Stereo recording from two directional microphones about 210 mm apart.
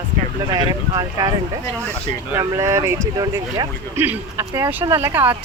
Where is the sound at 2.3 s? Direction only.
15° right (ahead or behind).